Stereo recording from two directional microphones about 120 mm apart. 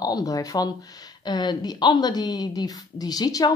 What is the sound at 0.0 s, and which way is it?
Speech, 30° left (ahead or behind).